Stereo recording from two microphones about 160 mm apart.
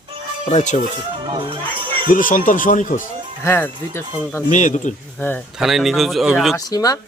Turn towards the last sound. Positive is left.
turn(degrees=20)  # may be behind; listen again after turning